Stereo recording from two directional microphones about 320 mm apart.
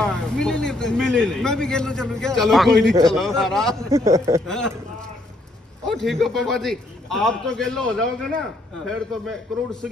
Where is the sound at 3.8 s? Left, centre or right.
Centre.